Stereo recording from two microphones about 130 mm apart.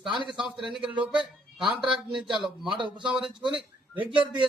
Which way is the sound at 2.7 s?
35° right (ahead or behind).